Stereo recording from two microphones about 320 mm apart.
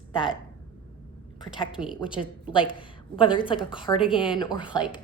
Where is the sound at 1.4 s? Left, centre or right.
Centre.